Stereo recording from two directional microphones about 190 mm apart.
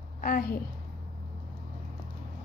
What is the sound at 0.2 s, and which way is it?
Speech, 50° left (ahead or behind).